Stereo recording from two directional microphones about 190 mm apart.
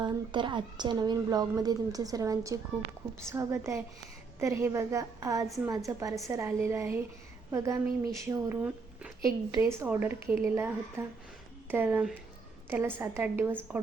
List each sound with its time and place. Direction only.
0.0 s a woman's voice: 25° right (ahead or behind)